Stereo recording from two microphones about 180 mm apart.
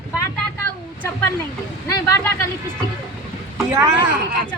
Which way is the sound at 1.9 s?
15° left (ahead or behind).